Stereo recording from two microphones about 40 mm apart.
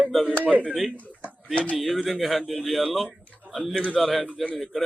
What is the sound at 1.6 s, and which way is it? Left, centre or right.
Speech, left.